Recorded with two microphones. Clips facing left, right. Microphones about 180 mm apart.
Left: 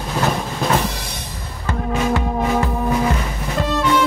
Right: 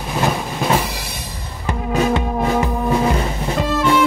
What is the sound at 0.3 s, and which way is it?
Train, 5° right (ahead or behind).